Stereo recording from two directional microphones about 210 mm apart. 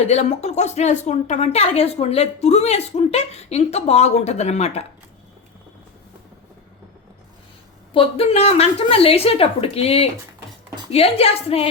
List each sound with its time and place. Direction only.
0.0 s speech: 30° left (ahead or behind)
7.9 s a woman's voice: 25° left (ahead or behind)